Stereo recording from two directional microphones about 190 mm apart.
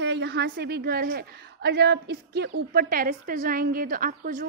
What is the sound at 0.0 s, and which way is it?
A woman's voice, 65° right (ahead or behind).